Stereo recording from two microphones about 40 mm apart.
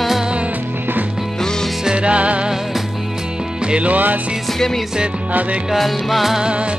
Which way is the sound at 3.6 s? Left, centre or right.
Right.